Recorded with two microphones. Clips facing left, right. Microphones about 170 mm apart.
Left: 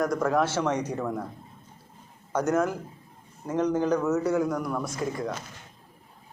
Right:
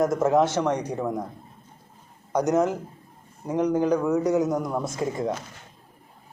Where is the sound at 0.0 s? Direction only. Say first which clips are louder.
Right 4 dB; 20° right (ahead or behind).